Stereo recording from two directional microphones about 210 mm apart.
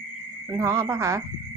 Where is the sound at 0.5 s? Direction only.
15° right (ahead or behind).